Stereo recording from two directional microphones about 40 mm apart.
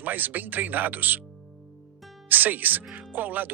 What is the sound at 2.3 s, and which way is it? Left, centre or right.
Speech, right.